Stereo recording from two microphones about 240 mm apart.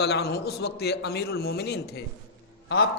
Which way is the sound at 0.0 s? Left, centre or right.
Left.